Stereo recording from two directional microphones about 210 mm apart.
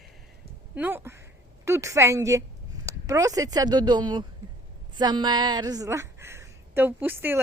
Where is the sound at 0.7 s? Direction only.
10° right (ahead or behind).